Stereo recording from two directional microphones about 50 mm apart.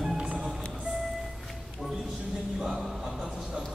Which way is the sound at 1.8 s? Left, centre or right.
Centre.